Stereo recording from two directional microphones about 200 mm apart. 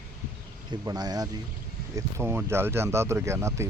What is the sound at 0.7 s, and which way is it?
Speech, 20° right (ahead or behind).